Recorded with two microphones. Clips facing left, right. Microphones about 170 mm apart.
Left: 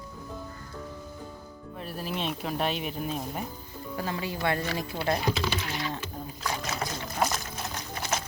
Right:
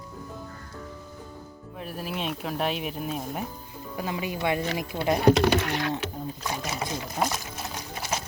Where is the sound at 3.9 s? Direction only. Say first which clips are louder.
Right 2 dB; 15° right (ahead or behind).